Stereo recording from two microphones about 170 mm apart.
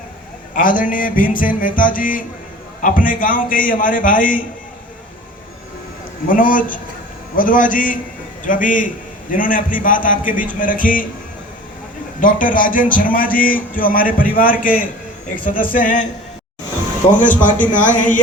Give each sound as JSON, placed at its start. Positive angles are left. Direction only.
{"t": 0.5, "sound": "a man's voice", "side_deg": 50}
{"t": 6.2, "sound": "a man's voice", "side_deg": 55}
{"t": 12.2, "sound": "a man's voice", "side_deg": 50}
{"t": 17.2, "sound": "speech", "side_deg": 10}
{"t": 17.6, "sound": "a man's voice", "side_deg": 50}